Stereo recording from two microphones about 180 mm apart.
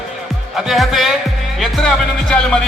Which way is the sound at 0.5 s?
Centre (ahead or behind).